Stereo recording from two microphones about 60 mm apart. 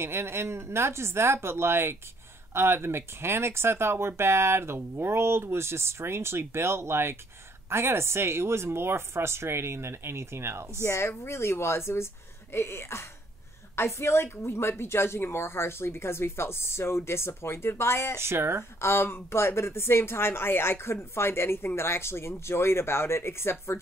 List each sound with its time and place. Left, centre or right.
0.0 s speech: right
10.9 s a woman's voice: left
18.1 s speech: right
18.8 s a woman's voice: left